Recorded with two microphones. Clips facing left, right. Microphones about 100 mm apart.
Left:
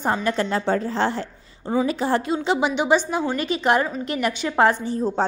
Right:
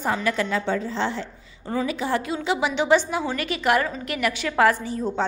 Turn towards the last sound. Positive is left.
turn(degrees=30)  # may be behind; listen again after turning